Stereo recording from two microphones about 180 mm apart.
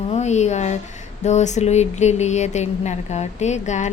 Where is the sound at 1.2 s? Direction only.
40° left (ahead or behind).